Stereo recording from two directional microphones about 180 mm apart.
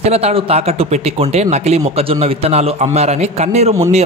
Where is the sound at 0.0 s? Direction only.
35° right (ahead or behind).